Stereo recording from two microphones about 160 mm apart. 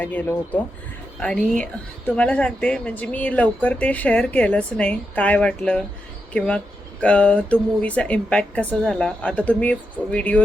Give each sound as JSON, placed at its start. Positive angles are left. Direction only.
{"t": 0.0, "sound": "a woman's voice", "side_deg": 10}